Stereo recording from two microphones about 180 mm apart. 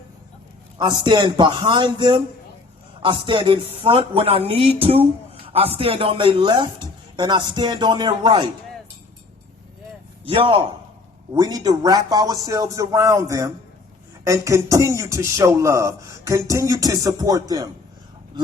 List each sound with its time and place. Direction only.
0.8 s a man's voice: 25° right (ahead or behind)
10.2 s a man's voice: 30° right (ahead or behind)